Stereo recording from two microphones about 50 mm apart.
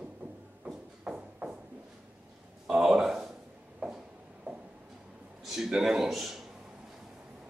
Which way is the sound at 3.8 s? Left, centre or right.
Centre.